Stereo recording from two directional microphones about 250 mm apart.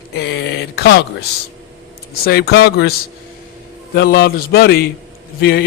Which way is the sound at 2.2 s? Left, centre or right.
Left.